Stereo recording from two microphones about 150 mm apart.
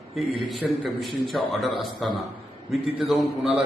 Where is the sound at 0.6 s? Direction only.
Centre (ahead or behind).